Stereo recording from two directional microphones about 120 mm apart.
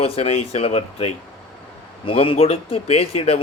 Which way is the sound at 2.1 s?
50° left (ahead or behind).